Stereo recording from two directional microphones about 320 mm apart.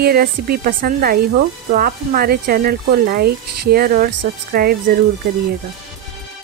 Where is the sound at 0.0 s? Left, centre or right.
Right.